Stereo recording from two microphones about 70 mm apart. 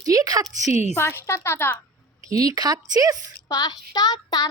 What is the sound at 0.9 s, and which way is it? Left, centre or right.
Speech, left.